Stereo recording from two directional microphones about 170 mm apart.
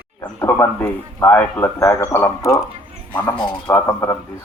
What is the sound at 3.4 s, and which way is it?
Speech, 25° left (ahead or behind).